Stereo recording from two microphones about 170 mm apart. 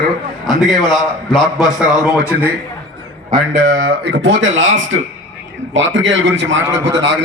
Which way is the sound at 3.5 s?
50° right (ahead or behind).